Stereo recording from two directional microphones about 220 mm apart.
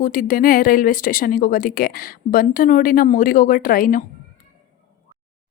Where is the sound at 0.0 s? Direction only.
40° left (ahead or behind).